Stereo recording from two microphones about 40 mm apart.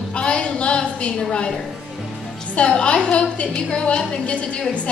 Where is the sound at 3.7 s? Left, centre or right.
Left.